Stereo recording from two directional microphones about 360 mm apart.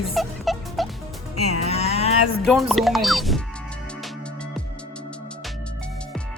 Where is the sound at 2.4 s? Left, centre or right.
Centre.